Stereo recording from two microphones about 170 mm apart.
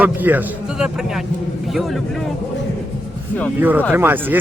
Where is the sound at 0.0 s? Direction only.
10° right (ahead or behind).